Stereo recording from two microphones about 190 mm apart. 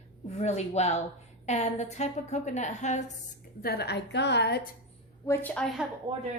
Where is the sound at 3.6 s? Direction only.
55° left (ahead or behind).